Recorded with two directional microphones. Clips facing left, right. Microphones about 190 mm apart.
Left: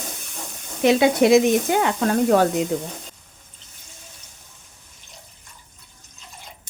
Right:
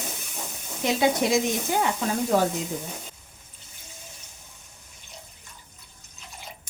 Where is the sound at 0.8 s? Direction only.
70° left (ahead or behind).